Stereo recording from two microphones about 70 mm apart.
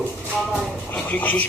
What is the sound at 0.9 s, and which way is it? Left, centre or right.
Speech, left.